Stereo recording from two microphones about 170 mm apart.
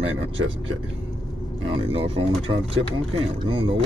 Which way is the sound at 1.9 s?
35° right (ahead or behind).